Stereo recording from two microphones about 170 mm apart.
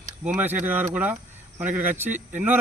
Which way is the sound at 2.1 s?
45° right (ahead or behind).